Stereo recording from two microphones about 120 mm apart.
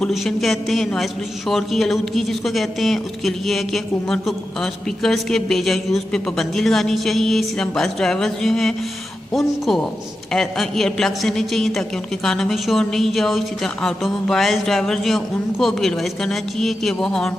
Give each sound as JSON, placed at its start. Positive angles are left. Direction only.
{"t": 0.0, "sound": "a man's voice", "side_deg": 0}